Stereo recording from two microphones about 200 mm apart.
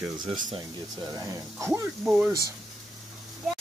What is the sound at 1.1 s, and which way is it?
Speech, 15° right (ahead or behind).